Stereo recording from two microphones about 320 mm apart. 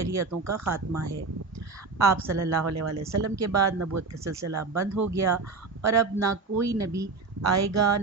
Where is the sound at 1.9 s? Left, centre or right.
Right.